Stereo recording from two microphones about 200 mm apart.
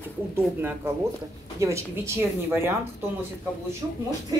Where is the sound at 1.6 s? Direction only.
15° right (ahead or behind).